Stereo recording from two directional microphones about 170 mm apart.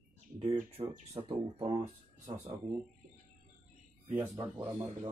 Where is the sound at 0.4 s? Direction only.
35° right (ahead or behind).